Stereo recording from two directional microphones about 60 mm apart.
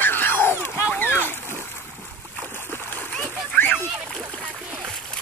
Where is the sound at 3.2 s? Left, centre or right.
Left.